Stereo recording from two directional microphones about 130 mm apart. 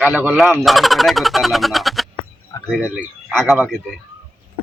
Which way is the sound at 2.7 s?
10° right (ahead or behind).